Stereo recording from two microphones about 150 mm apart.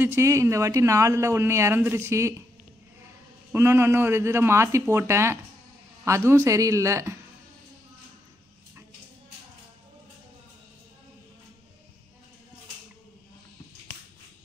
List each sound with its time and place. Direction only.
0.0 s speech: 15° right (ahead or behind)
3.5 s a man's voice: 15° right (ahead or behind)